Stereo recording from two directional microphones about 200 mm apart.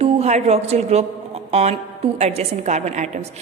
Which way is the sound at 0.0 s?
30° right (ahead or behind).